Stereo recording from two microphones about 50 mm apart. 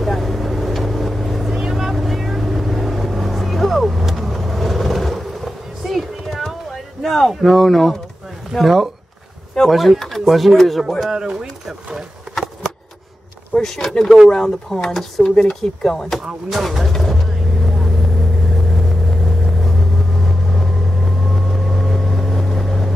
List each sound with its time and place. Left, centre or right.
0.0 s vehicle: centre
8.5 s speech: centre
11.1 s speech: centre
13.6 s speech: centre
15.2 s speech: centre
16.4 s speech: centre
16.9 s vehicle: centre